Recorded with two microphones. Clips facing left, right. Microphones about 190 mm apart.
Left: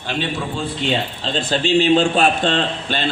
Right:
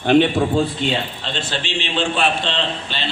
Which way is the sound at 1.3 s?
40° left (ahead or behind).